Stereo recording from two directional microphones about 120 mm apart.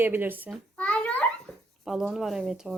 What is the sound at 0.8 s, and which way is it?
Babbling, 10° left (ahead or behind).